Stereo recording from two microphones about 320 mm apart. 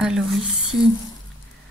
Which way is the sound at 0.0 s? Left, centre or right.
Centre.